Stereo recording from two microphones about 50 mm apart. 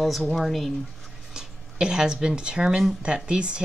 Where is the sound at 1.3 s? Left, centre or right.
Centre.